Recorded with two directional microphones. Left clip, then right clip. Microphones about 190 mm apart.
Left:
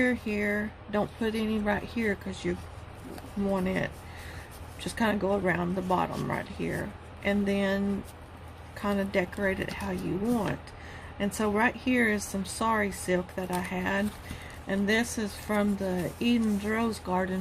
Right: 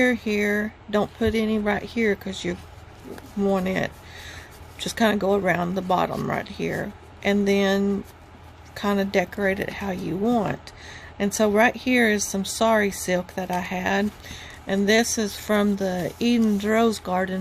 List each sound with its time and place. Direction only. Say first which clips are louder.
0.0 s speech: right 6 dB; 45° right (ahead or behind)
11.2 s speech: right 8 dB; 50° right (ahead or behind)